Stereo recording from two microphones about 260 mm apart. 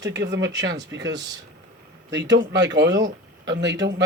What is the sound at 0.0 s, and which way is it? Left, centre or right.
Speech, right.